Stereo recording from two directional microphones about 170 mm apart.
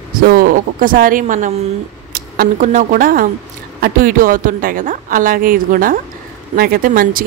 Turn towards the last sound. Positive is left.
turn(degrees=-55)  # may be behind; listen again after turning